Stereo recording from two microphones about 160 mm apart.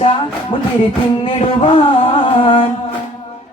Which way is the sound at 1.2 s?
35° left (ahead or behind).